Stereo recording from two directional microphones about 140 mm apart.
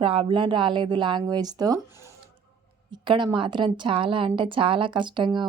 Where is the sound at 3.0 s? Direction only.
35° right (ahead or behind).